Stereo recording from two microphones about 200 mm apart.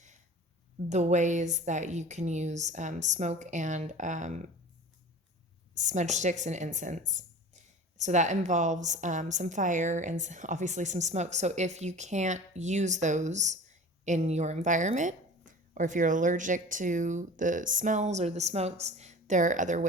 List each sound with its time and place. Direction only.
0.9 s a woman's voice: 35° right (ahead or behind)
5.7 s a woman's voice: 35° right (ahead or behind)